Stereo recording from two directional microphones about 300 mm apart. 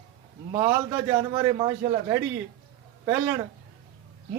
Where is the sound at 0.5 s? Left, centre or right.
Centre.